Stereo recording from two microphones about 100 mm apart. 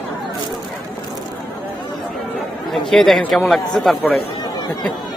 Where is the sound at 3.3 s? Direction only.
Centre (ahead or behind).